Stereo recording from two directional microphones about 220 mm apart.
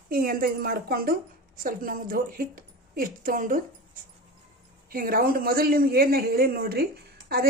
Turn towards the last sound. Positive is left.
turn(degrees=-45)  # may be behind; listen again after turning